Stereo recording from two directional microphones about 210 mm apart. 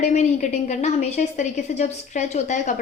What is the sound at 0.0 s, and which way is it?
A woman's voice, 35° left (ahead or behind).